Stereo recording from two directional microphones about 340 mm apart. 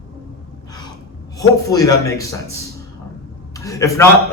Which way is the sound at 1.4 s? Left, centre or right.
Centre.